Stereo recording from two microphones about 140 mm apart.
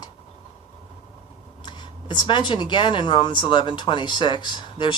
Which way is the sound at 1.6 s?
35° left (ahead or behind).